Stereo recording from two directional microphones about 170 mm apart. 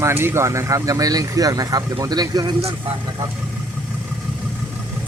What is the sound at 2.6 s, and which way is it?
Speech, 35° right (ahead or behind).